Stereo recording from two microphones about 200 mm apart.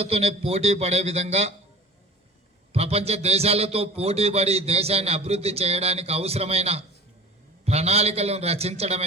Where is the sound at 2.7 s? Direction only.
30° right (ahead or behind).